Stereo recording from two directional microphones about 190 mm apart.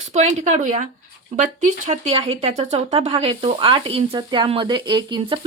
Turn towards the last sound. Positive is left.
turn(degrees=-25)  # may be behind; listen again after turning